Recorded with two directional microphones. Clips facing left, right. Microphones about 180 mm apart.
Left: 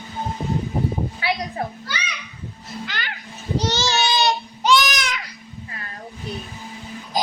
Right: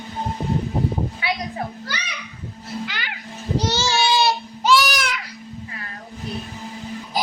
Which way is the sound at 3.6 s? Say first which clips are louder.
Right 1 dB; 10° right (ahead or behind).